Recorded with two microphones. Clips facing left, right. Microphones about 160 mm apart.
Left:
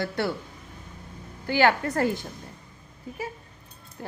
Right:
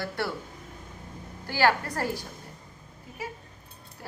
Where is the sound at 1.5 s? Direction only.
20° left (ahead or behind).